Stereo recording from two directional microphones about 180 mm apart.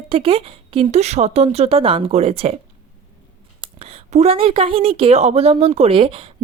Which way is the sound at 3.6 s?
35° right (ahead or behind).